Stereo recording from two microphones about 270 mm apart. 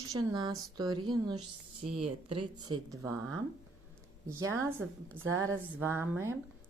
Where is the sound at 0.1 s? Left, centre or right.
Centre.